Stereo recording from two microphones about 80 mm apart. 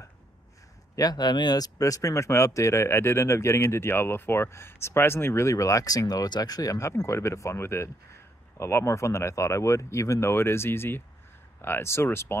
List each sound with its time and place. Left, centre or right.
0.9 s speech: left
1.8 s speech: left